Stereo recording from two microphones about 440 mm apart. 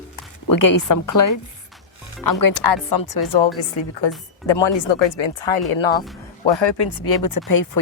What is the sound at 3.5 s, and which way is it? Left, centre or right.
Speech, left.